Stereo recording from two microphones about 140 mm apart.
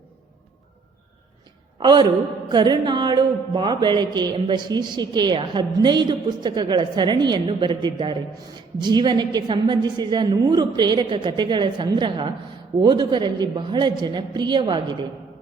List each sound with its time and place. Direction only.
1.8 s a woman's voice: 30° right (ahead or behind)